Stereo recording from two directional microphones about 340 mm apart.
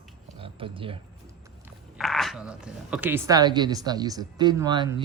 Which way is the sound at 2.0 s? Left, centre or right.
Centre.